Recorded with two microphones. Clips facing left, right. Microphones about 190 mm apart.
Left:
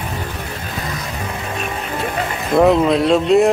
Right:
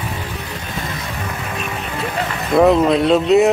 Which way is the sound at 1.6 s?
Centre (ahead or behind).